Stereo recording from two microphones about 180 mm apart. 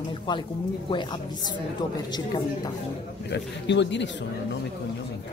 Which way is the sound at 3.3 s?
75° left (ahead or behind).